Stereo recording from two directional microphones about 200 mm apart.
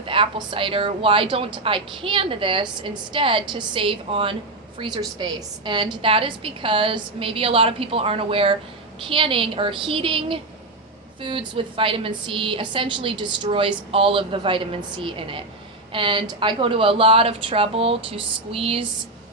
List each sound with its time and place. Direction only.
0.0 s a woman's voice: 25° right (ahead or behind)